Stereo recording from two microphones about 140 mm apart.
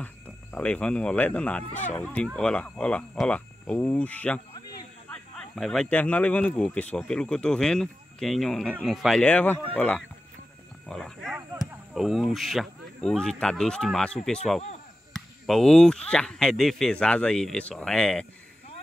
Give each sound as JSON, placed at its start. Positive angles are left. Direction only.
{"t": 0.0, "sound": "speech", "side_deg": 10}
{"t": 1.7, "sound": "speech", "side_deg": 60}
{"t": 2.0, "sound": "speech", "side_deg": 5}